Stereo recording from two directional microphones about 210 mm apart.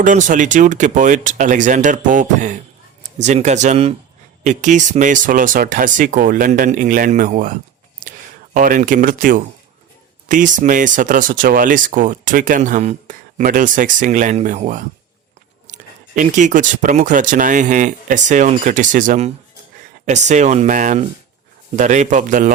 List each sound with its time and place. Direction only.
0.0 s speech: 35° right (ahead or behind)
8.0 s a sound: 40° right (ahead or behind)
8.5 s speech: 40° right (ahead or behind)